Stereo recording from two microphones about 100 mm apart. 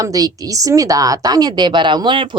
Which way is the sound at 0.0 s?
40° right (ahead or behind).